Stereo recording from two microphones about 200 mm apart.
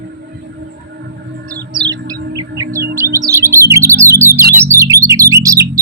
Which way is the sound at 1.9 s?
20° right (ahead or behind).